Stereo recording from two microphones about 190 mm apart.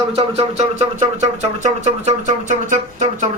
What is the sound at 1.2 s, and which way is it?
Speech, 35° right (ahead or behind).